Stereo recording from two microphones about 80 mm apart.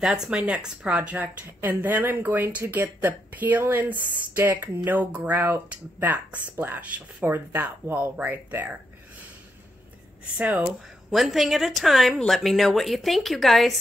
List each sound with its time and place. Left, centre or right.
0.0 s speech: centre
10.3 s speech: centre
11.1 s a woman's voice: centre